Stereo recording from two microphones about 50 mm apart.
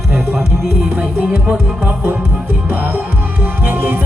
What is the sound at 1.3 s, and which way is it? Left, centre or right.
Music, right.